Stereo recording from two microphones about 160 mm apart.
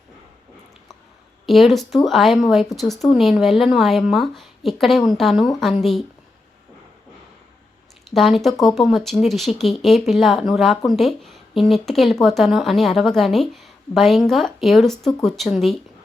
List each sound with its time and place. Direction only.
1.5 s speech: centre (ahead or behind)
8.1 s speech: centre (ahead or behind)